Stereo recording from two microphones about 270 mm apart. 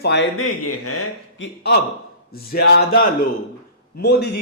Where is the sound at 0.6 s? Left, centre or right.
Left.